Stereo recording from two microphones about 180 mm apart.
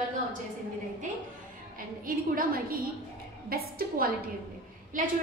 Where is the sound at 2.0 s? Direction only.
50° right (ahead or behind).